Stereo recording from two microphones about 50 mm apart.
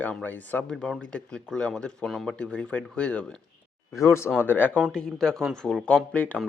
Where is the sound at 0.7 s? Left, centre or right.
Centre.